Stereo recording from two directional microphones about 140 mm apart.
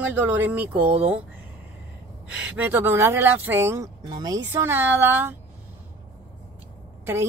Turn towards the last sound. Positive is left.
turn(degrees=-15)  # may be behind; listen again after turning